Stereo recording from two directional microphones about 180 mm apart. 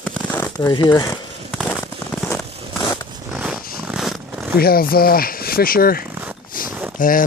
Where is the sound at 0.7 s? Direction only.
25° left (ahead or behind).